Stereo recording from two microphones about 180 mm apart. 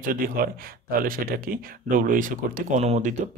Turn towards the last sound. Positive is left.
turn(degrees=-40)  # may be behind; listen again after turning